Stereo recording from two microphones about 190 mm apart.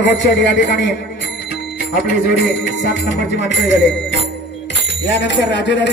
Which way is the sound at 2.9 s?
70° left (ahead or behind).